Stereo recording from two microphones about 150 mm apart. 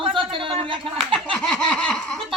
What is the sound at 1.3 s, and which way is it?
Laughter, 5° left (ahead or behind).